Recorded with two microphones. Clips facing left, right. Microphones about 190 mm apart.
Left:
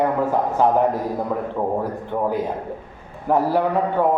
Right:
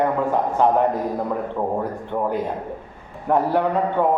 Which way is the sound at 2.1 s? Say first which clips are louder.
Left 1 dB; 15° left (ahead or behind).